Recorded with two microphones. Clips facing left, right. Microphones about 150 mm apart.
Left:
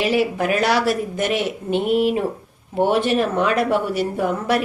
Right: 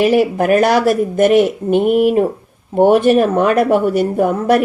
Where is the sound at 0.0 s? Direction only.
50° right (ahead or behind).